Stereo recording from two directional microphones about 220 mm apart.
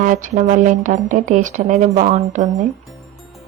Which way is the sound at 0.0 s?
35° right (ahead or behind).